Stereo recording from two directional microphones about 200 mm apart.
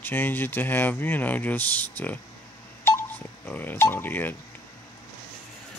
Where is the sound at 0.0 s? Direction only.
10° left (ahead or behind).